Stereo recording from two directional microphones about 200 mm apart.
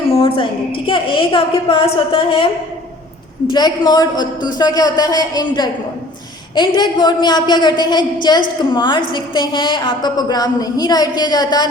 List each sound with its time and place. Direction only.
0.1 s a woman's voice: 25° left (ahead or behind)
3.5 s a woman's voice: 20° left (ahead or behind)
6.7 s a woman's voice: 20° left (ahead or behind)